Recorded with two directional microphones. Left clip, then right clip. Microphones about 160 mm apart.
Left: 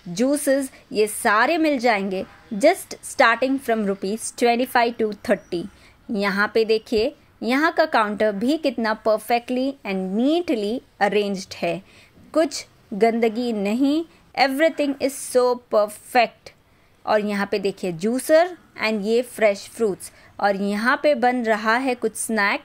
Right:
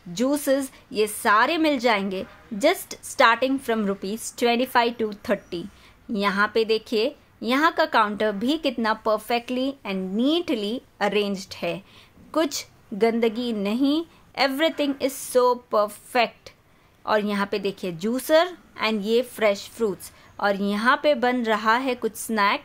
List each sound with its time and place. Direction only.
0.1 s a woman's voice: 15° left (ahead or behind)